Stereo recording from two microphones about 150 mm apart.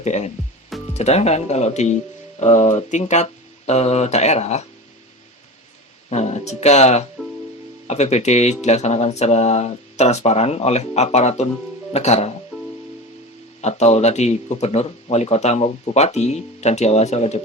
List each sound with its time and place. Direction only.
0.0 s speech: 50° left (ahead or behind)
6.1 s speech: 45° left (ahead or behind)
13.6 s speech: 45° left (ahead or behind)